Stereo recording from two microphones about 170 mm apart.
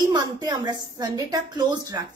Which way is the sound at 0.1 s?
25° right (ahead or behind).